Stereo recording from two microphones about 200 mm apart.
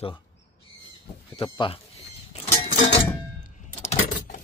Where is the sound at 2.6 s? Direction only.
35° left (ahead or behind).